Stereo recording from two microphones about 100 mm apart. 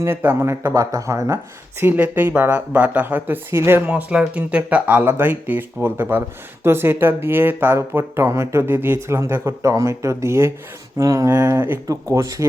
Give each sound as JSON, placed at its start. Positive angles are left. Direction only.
{"t": 0.0, "sound": "speech", "side_deg": -20}
{"t": 0.7, "sound": "a man's voice", "side_deg": -35}
{"t": 1.8, "sound": "a man's voice", "side_deg": -20}